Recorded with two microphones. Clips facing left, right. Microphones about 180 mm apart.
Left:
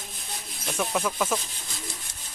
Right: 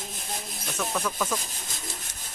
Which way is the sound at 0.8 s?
10° left (ahead or behind).